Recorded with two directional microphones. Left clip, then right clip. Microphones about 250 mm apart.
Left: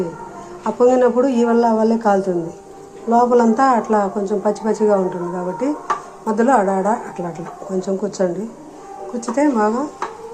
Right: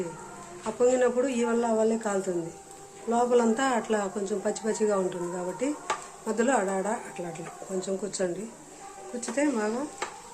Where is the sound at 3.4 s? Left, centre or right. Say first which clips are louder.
Left 11 dB; centre.